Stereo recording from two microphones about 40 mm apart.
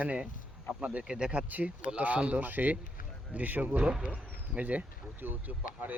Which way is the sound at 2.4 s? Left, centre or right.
Right.